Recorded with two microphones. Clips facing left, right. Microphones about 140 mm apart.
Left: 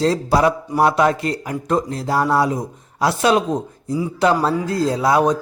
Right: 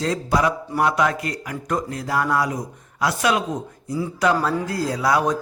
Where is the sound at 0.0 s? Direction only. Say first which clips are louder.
Left 5 dB; 30° left (ahead or behind).